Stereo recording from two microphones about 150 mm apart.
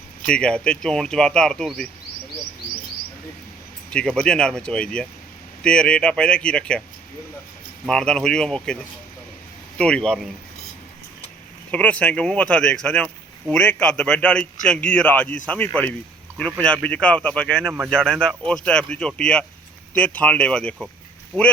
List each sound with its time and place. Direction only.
0.3 s speech: 5° left (ahead or behind)
3.9 s speech: 5° left (ahead or behind)
7.9 s speech: 5° left (ahead or behind)
11.7 s speech: 10° left (ahead or behind)